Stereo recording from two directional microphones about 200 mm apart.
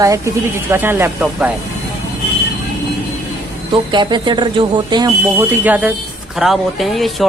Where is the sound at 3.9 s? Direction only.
20° right (ahead or behind); by 7.3 s centre (ahead or behind).